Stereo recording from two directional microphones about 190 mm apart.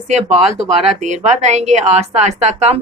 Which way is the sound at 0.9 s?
40° right (ahead or behind).